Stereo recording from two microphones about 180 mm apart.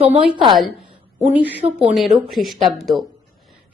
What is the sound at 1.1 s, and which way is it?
A woman's voice, 10° right (ahead or behind).